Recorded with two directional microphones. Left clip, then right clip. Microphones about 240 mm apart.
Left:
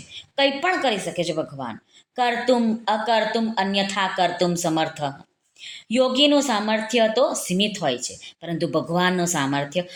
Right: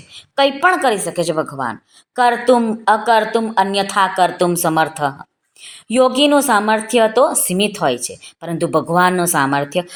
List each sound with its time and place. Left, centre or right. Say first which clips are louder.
0.3 s a woman's voice: right 7 dB; right